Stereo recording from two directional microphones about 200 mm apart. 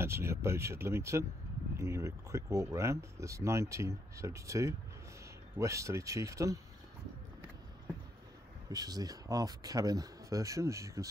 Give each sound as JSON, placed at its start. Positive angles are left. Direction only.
{"t": 0.0, "sound": "speech", "side_deg": -10}
{"t": 8.6, "sound": "speech", "side_deg": -20}